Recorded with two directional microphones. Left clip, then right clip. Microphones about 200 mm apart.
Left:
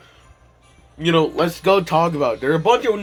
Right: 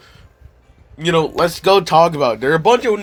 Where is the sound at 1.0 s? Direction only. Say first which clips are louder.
Right 2 dB; 50° right (ahead or behind).